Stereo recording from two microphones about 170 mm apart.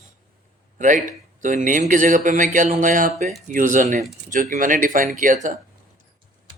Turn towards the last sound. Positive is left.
turn(degrees=-50)  # may be behind; listen again after turning